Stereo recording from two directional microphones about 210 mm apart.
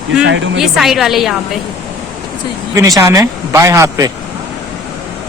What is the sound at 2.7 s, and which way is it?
A man's voice, 15° right (ahead or behind).